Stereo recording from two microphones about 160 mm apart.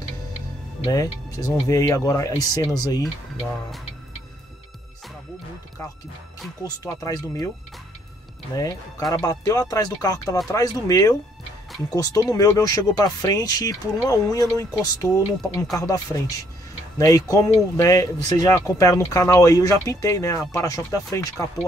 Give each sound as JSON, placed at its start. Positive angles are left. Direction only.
{"t": 0.8, "sound": "speech", "side_deg": 20}
{"t": 6.6, "sound": "speech", "side_deg": 20}
{"t": 9.1, "sound": "speech", "side_deg": 25}